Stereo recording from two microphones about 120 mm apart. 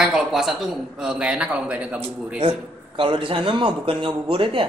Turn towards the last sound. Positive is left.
turn(degrees=-45)  # may be behind; listen again after turning